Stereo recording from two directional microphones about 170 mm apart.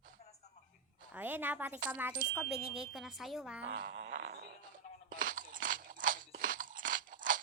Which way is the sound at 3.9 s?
90° right.